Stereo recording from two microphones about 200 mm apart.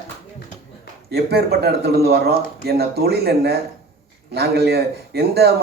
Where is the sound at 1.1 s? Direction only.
50° right (ahead or behind).